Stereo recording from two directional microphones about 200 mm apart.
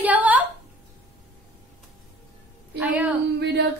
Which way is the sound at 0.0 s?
10° right (ahead or behind).